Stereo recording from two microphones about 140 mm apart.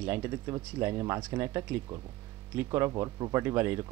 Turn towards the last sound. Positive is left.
turn(degrees=-15)  # may be behind; listen again after turning